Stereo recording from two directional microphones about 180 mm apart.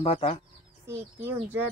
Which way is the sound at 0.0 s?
30° left (ahead or behind).